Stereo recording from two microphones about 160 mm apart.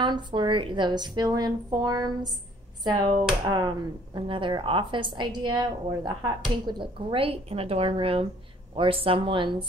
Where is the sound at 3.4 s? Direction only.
25° right (ahead or behind).